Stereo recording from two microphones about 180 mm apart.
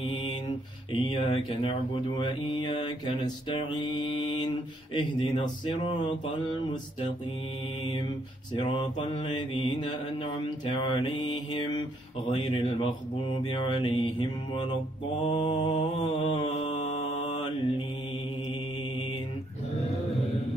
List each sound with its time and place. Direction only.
0.1 s mantra: 25° left (ahead or behind)
8.5 s mantra: 25° left (ahead or behind)